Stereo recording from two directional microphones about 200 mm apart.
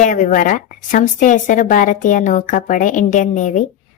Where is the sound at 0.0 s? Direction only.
40° left (ahead or behind).